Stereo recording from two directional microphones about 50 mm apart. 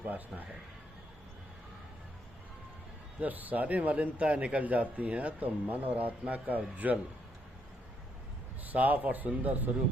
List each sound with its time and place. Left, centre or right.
3.2 s a man's voice: right
8.6 s a man's voice: right